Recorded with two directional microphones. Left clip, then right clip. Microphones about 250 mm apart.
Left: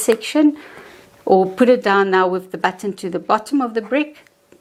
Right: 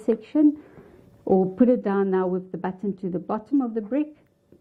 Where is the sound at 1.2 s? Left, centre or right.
Left.